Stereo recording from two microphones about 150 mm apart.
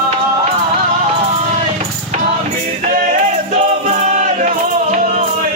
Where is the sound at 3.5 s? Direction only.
55° right (ahead or behind).